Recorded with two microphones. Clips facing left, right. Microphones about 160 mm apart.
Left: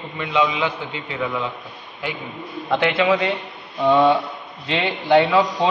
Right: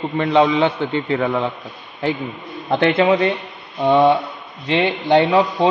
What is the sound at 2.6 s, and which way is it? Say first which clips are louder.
Speech: right 4 dB; 40° right (ahead or behind).